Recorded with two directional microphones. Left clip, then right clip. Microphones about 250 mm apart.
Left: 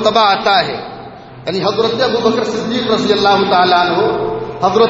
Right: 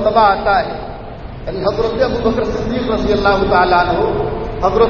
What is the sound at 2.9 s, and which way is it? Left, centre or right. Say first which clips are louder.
A man's voice: left 2 dB; left.